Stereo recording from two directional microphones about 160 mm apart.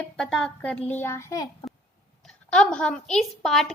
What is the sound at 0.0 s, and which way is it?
A woman's voice, 5° left (ahead or behind).